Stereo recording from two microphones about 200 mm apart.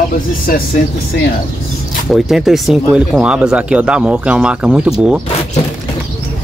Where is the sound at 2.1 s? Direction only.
Centre (ahead or behind).